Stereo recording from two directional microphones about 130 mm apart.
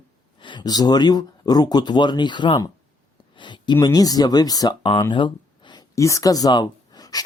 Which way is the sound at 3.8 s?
30° left (ahead or behind).